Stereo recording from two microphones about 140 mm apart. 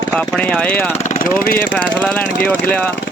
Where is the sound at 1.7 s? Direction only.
10° left (ahead or behind).